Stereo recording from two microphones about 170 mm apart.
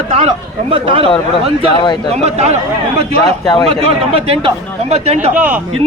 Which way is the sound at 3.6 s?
35° right (ahead or behind).